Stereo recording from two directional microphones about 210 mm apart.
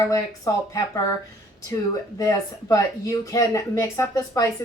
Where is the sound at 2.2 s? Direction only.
15° left (ahead or behind).